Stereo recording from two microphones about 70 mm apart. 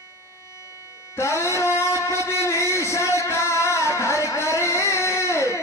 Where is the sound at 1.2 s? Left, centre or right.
Left.